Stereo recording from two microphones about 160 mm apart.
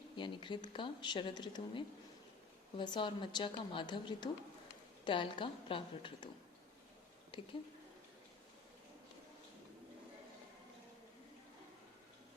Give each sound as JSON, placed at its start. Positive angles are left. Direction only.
{"t": 0.2, "sound": "a woman's voice", "side_deg": 30}
{"t": 7.3, "sound": "speech", "side_deg": 30}